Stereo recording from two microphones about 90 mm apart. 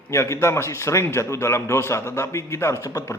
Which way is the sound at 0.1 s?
30° left (ahead or behind).